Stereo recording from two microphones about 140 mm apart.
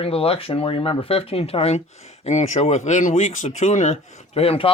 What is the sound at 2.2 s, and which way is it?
Speech, 55° left (ahead or behind).